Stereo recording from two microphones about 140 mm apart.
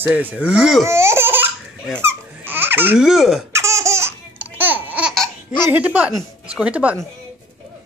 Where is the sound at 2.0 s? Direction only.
15° right (ahead or behind).